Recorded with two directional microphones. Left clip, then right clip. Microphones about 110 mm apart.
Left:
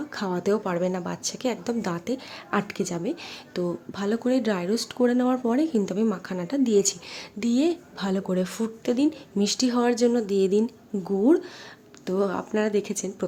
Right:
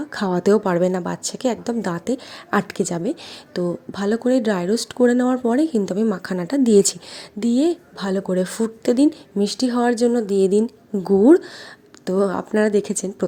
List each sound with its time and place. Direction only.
0.1 s a woman's voice: 45° right (ahead or behind)
7.3 s a woman's voice: 30° right (ahead or behind)
8.8 s speech: 55° right (ahead or behind)
9.4 s a woman's voice: 25° right (ahead or behind)
11.0 s speech: 65° right (ahead or behind)
12.0 s a woman's voice: 40° right (ahead or behind)